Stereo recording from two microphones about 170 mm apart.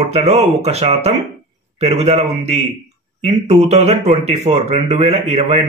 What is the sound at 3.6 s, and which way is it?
Mantra, 40° right (ahead or behind).